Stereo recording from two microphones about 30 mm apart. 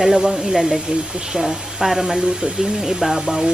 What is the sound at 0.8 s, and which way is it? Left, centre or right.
Speech, right.